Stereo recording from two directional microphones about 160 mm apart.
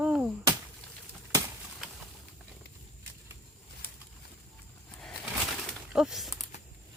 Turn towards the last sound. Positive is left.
turn(degrees=0)  # may be behind; listen again after turning